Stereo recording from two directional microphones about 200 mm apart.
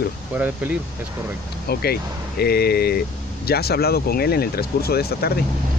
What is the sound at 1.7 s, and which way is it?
Speech, 50° left (ahead or behind).